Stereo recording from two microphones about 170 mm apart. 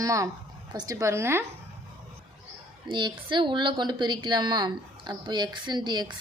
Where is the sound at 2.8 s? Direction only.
30° right (ahead or behind).